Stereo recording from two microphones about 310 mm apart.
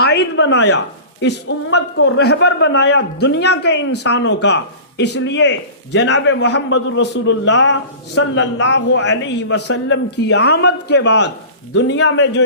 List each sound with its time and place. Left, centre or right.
0.0 s speech: left